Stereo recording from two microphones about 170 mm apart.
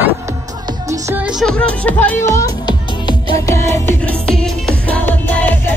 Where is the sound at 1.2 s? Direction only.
Centre (ahead or behind); by 2.8 s 25° left (ahead or behind).